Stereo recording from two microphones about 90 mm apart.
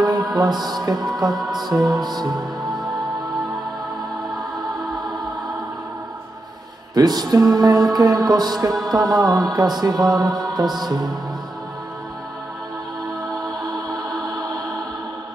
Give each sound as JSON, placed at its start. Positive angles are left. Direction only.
{"t": 0.0, "sound": "music", "side_deg": -50}
{"t": 1.3, "sound": "music", "side_deg": 0}
{"t": 1.7, "sound": "music", "side_deg": -50}
{"t": 6.9, "sound": "music", "side_deg": -50}